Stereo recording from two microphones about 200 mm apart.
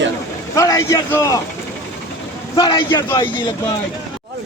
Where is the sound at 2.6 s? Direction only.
20° left (ahead or behind).